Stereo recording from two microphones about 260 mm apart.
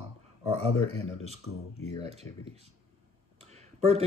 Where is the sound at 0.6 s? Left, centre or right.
Right.